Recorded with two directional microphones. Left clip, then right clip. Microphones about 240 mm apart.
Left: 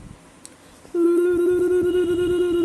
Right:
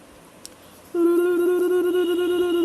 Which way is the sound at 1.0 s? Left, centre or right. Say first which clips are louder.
Left 1 dB; centre.